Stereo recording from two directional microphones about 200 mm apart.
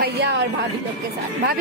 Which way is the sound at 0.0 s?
55° right (ahead or behind).